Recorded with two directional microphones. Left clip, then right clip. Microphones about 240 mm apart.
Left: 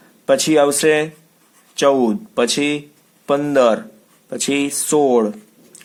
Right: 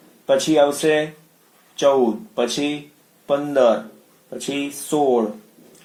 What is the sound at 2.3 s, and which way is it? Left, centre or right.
Speech, left.